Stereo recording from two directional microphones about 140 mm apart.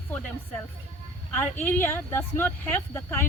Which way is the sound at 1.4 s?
15° left (ahead or behind).